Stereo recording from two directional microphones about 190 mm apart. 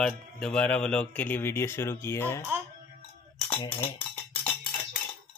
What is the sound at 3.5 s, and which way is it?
Speech, 25° left (ahead or behind).